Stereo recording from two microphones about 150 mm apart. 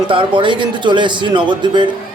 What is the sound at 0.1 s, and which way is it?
A man's voice, 35° right (ahead or behind).